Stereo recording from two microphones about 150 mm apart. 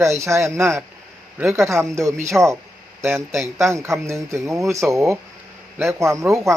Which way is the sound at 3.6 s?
20° right (ahead or behind).